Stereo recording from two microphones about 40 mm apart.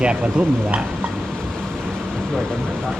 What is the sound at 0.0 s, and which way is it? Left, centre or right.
Speech, right.